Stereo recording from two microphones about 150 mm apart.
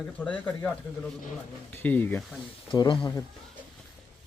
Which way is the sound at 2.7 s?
35° left (ahead or behind).